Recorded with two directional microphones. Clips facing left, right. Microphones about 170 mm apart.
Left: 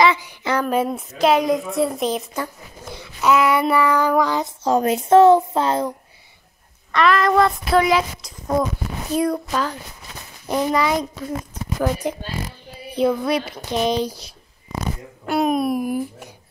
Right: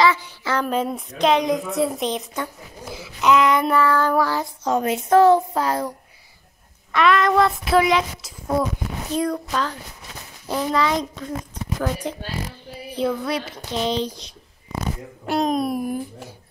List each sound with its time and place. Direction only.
0.0 s a woman's voice: 15° left (ahead or behind)
4.6 s speech: 35° left (ahead or behind)
5.1 s speech: 25° left (ahead or behind)
6.9 s a woman's voice: centre (ahead or behind)
9.1 s a woman's voice: 10° left (ahead or behind)